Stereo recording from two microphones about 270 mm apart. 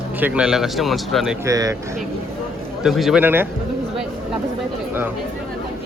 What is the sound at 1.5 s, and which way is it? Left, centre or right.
Speech, centre.